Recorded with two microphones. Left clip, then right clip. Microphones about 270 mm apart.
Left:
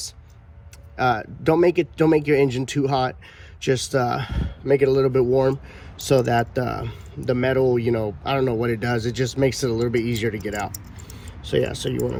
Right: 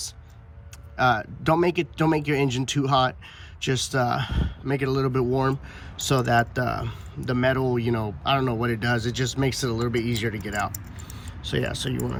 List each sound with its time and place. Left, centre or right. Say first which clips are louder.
0.9 s speech: even; centre
5.0 s speech: left 6 dB; right
5.3 s speech: left 5 dB; centre
11.1 s a sound: left 6 dB; centre